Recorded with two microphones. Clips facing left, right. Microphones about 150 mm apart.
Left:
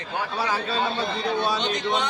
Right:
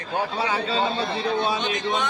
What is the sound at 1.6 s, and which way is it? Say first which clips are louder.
Speech: even; 20° left (ahead or behind).